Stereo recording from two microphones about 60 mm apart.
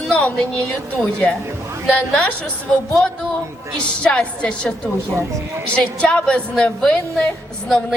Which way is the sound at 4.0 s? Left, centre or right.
Centre.